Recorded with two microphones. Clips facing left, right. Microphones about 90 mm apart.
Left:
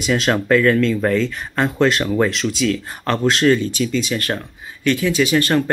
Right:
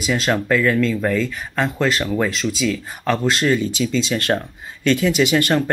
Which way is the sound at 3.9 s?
30° right (ahead or behind).